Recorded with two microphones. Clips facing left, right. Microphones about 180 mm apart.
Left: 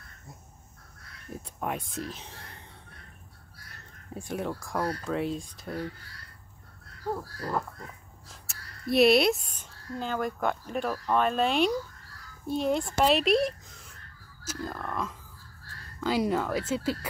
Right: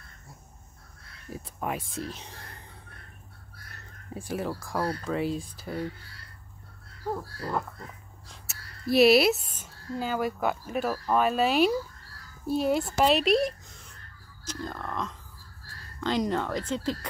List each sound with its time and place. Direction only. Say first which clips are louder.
1.3 s speech: right 1 dB; centre (ahead or behind)
4.3 s speech: right 1 dB; centre (ahead or behind)
7.2 s speech: even; centre (ahead or behind)